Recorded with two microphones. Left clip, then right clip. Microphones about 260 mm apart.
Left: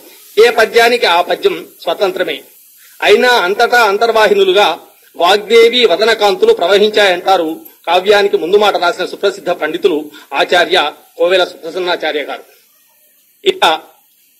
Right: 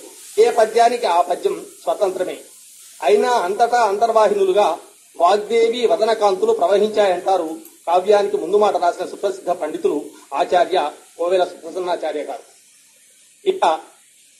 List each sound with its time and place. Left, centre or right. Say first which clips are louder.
0.4 s a man's voice: left 5 dB; left
13.4 s speech: left 6 dB; left